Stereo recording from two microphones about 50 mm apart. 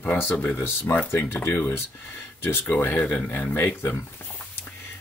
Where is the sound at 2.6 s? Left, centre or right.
Left.